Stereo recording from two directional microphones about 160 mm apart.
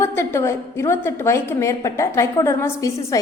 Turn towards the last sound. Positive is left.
turn(degrees=20)  # may be behind; listen again after turning